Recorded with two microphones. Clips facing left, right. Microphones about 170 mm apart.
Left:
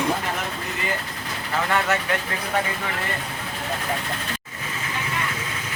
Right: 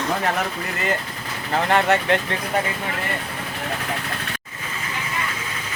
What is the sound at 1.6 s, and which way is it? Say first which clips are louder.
Speech: right 5 dB; 30° right (ahead or behind).